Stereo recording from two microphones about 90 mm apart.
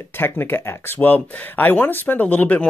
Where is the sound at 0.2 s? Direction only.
25° left (ahead or behind).